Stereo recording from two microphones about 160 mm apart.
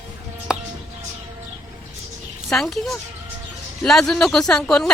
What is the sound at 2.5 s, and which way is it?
Speech, centre (ahead or behind).